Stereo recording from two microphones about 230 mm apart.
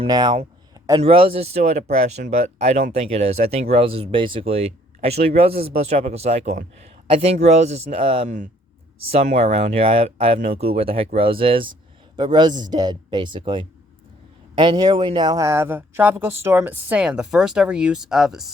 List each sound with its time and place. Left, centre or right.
0.0 s speech: centre